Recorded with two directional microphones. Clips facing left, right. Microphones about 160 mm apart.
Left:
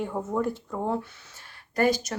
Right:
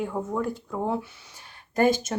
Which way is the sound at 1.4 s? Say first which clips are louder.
Right 2 dB; 20° right (ahead or behind).